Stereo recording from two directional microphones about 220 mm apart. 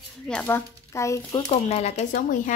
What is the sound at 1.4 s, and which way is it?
Speech, 30° left (ahead or behind).